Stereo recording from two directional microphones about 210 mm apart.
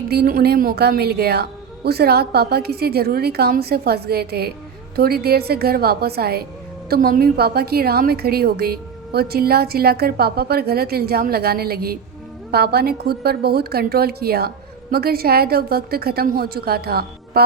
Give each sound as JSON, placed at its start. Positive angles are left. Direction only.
{"t": 0.1, "sound": "a woman's voice", "side_deg": -45}